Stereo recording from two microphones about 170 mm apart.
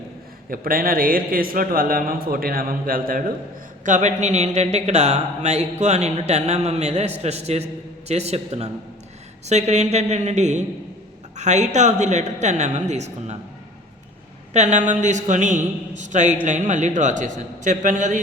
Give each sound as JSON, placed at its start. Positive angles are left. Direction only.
{"t": 0.5, "sound": "a man's voice", "side_deg": -55}
{"t": 14.5, "sound": "a man's voice", "side_deg": -40}